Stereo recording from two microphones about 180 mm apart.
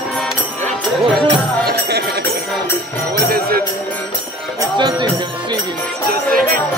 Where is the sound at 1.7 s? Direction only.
65° right (ahead or behind).